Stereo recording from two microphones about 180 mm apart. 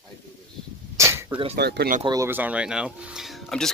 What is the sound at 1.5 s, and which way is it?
Speech, 65° right (ahead or behind).